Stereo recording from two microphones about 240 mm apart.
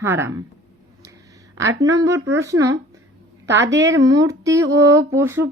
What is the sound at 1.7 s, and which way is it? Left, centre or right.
Speech, centre.